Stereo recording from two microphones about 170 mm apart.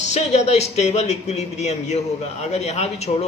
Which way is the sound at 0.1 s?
40° left (ahead or behind).